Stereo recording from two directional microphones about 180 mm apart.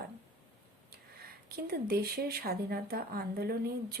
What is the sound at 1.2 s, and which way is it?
Speech, 55° right (ahead or behind).